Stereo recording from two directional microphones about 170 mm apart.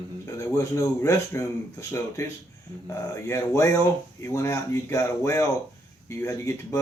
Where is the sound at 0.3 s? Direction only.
15° left (ahead or behind).